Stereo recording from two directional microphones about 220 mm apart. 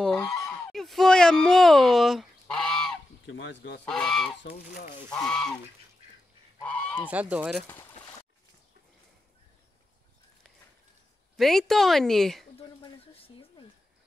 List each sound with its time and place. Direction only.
0.3 s honk: centre (ahead or behind)
3.3 s speech: 55° left (ahead or behind)
3.8 s a woman's voice: centre (ahead or behind)
4.4 s speech: 45° left (ahead or behind)
5.1 s a woman's voice: 5° left (ahead or behind)
6.6 s goose: 5° left (ahead or behind)
7.1 s speech: 5° right (ahead or behind)
11.3 s a woman's voice: centre (ahead or behind)
12.5 s speech: 25° left (ahead or behind)